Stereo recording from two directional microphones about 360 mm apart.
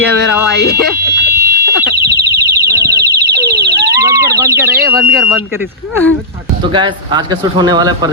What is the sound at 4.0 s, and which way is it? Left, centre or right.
Alarm, centre.